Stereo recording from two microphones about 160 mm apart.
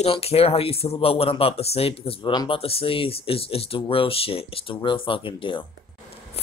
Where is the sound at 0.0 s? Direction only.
40° left (ahead or behind).